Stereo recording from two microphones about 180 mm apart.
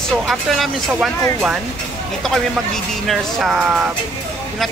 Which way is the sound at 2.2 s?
Centre (ahead or behind).